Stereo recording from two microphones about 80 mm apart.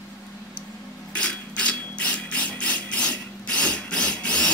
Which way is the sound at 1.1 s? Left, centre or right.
Centre.